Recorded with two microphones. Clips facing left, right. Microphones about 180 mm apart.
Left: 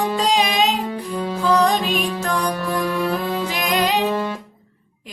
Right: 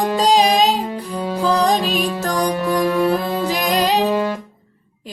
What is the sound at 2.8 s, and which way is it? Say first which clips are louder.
Music: right 6 dB; 20° right (ahead or behind).